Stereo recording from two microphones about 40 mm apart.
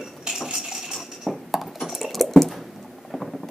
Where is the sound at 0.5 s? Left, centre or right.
Centre.